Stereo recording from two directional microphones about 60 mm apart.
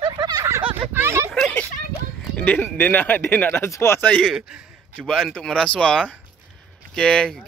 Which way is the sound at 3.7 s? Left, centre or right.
Left.